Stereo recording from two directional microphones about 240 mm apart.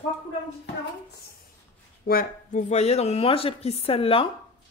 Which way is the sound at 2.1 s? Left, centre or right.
Left.